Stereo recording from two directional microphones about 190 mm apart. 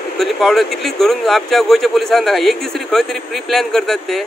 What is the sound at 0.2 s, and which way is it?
Speech, centre (ahead or behind).